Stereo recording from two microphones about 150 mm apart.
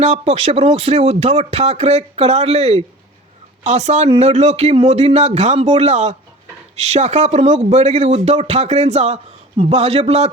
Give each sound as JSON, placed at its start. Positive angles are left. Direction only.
{"t": 0.0, "sound": "speech", "side_deg": -50}